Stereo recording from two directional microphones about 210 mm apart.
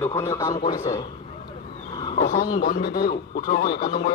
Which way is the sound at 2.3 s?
40° left (ahead or behind).